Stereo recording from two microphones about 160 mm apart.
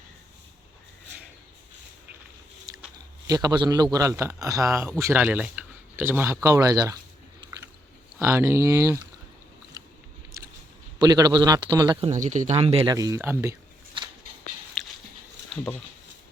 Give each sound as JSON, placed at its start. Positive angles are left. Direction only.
{"t": 3.2, "sound": "speech", "side_deg": -25}
{"t": 7.4, "sound": "biting", "side_deg": -30}
{"t": 8.2, "sound": "speech", "side_deg": -15}
{"t": 11.0, "sound": "speech", "side_deg": -25}
{"t": 12.2, "sound": "speech", "side_deg": -50}
{"t": 14.8, "sound": "dog", "side_deg": 0}